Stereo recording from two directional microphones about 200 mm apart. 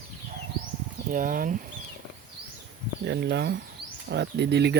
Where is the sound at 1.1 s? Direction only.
45° right (ahead or behind).